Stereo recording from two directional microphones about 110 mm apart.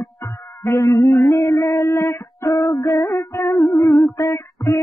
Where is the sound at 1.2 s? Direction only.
30° left (ahead or behind).